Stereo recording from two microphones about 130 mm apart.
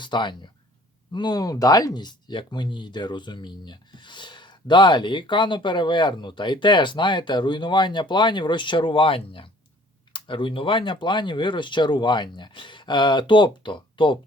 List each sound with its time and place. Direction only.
0.0 s speech: 35° left (ahead or behind)